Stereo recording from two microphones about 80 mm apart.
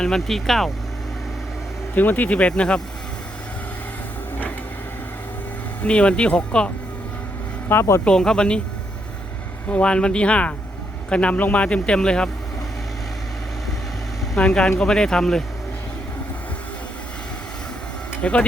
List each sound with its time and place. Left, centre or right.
0.0 s speech: centre
2.0 s a man's voice: left
5.8 s a man's voice: centre
7.7 s speech: left
8.0 s a man's voice: centre
9.6 s a man's voice: centre
14.3 s a man's voice: centre
18.2 s speech: centre